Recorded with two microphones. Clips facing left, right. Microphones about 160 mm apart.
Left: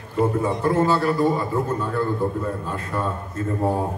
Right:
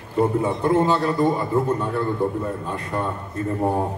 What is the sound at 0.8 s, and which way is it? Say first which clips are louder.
Speech: even; 20° right (ahead or behind).